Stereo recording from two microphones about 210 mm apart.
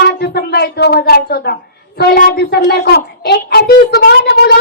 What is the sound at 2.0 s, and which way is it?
Child singing, 45° left (ahead or behind).